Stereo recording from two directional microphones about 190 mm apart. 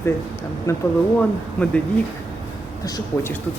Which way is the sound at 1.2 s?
5° left (ahead or behind).